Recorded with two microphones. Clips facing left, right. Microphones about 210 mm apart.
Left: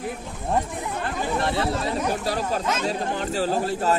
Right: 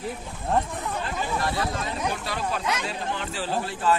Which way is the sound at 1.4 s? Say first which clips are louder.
Left 4 dB; 35° left (ahead or behind).